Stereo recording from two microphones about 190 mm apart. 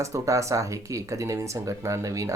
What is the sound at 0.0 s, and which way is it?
Speech, 15° right (ahead or behind).